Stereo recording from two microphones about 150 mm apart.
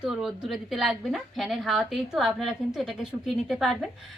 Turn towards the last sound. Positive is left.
turn(degrees=0)  # may be behind; listen again after turning